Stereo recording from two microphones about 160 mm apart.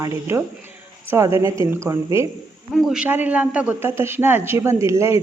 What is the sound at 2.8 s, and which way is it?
Speech, 5° right (ahead or behind).